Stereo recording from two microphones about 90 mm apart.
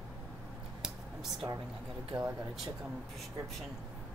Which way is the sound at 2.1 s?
10° right (ahead or behind).